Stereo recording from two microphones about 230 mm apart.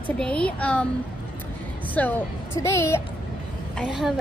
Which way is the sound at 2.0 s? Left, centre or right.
Centre.